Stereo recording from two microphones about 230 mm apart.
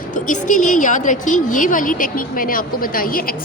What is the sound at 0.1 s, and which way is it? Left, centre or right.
A woman's voice, left.